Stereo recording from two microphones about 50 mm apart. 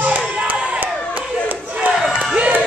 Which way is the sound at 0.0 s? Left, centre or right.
Right.